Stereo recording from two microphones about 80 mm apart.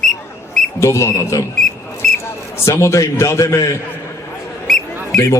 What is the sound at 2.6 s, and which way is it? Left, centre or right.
A man's voice, left.